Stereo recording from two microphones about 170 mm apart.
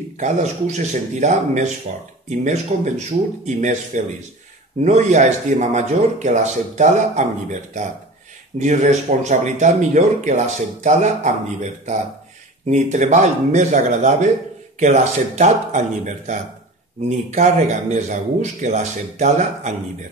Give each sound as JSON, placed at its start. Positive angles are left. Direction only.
{"t": 0.2, "sound": "a man's voice", "side_deg": -40}
{"t": 12.6, "sound": "a man's voice", "side_deg": -45}
{"t": 17.3, "sound": "a man's voice", "side_deg": -45}